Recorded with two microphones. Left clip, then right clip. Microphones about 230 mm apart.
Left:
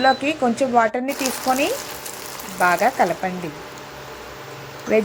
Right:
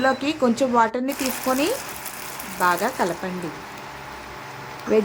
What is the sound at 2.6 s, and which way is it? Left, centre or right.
Speech, centre.